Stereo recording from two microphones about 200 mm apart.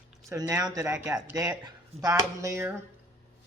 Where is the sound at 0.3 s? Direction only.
15° right (ahead or behind).